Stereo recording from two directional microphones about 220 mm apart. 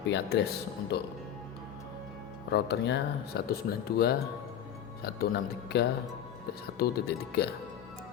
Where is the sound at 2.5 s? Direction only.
45° left (ahead or behind).